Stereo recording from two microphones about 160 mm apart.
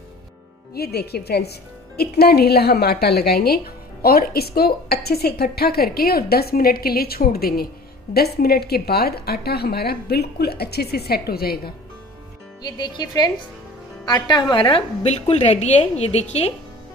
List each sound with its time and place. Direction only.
0.7 s a woman's voice: 85° left
12.6 s speech: 25° left (ahead or behind)
15.0 s a woman's voice: 40° left (ahead or behind)